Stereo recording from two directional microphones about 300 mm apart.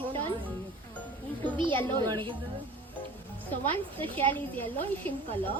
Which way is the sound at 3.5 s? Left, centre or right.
Centre.